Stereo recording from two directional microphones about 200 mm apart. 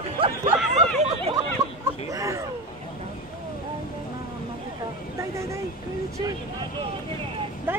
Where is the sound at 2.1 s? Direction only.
15° right (ahead or behind).